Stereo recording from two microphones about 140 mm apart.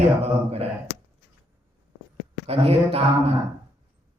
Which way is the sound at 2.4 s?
45° right (ahead or behind).